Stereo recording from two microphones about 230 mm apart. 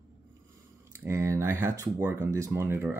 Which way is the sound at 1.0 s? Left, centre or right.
Centre.